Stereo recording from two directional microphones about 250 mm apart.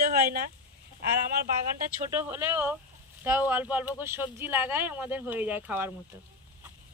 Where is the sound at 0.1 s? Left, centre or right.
Right.